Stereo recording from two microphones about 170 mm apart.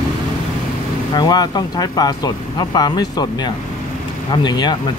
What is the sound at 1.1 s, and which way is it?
Speech, 25° left (ahead or behind).